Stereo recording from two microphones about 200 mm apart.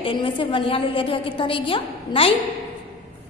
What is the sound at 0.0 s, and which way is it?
A woman's voice, 25° left (ahead or behind).